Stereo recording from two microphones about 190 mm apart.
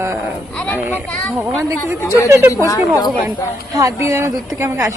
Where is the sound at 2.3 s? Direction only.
15° right (ahead or behind).